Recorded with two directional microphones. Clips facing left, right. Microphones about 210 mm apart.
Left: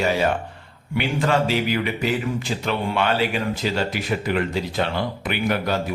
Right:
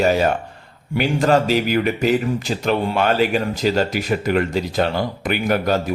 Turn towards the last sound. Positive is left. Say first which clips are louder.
# right 4 dB
turn(degrees=-45)  # may be behind; listen again after turning